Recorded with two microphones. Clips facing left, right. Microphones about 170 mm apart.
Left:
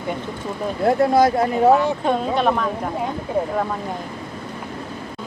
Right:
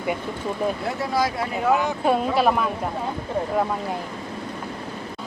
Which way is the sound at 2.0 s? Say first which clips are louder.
Right 4 dB; 5° right (ahead or behind).